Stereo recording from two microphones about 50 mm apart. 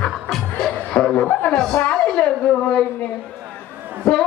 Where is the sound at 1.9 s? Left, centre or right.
Centre.